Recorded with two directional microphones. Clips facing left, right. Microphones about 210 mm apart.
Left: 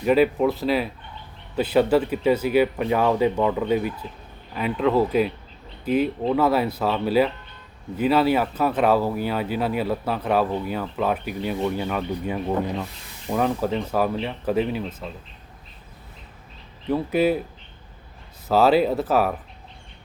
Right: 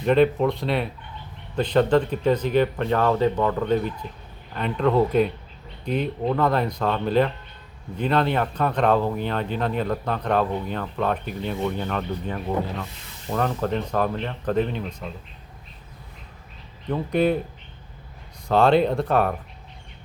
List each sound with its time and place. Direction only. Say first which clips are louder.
0.0 s speech: even; 5° left (ahead or behind)
16.9 s speech: left 1 dB; 5° left (ahead or behind)
18.4 s speech: even; 5° left (ahead or behind)